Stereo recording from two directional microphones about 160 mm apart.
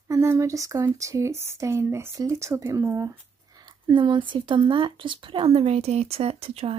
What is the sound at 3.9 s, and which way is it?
Speech, 30° right (ahead or behind).